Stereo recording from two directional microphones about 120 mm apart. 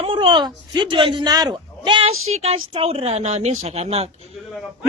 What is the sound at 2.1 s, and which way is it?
Speech, 55° right (ahead or behind).